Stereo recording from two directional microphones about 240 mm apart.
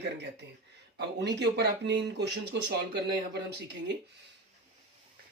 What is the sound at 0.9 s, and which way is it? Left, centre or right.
Speech, right.